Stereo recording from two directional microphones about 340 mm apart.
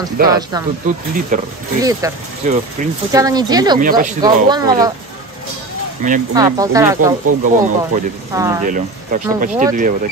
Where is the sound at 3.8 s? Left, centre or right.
Right.